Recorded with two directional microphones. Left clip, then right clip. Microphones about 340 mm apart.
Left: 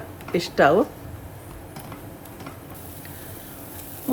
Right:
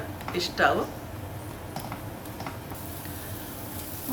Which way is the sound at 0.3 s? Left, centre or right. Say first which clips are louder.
Left 6 dB; centre.